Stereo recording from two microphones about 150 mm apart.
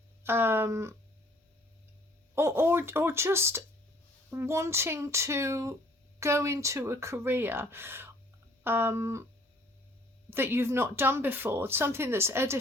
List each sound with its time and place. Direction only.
0.2 s speech: 15° right (ahead or behind)
2.3 s speech: 15° right (ahead or behind)
10.2 s speech: 15° right (ahead or behind)